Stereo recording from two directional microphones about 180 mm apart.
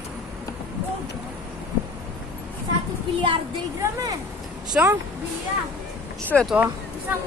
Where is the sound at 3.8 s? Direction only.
20° right (ahead or behind).